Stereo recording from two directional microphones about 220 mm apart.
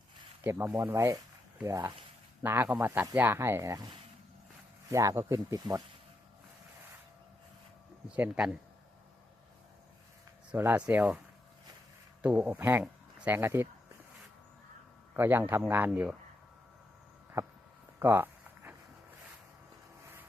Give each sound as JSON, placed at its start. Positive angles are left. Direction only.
{"t": 0.4, "sound": "speech", "side_deg": -10}
{"t": 8.1, "sound": "speech", "side_deg": -5}
{"t": 10.5, "sound": "speech", "side_deg": -5}
{"t": 12.2, "sound": "speech", "side_deg": -5}
{"t": 15.1, "sound": "speech", "side_deg": -10}
{"t": 17.4, "sound": "a sound", "side_deg": -10}